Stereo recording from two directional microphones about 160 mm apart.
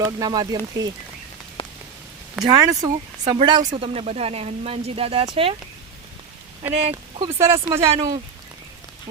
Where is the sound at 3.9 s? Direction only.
40° right (ahead or behind).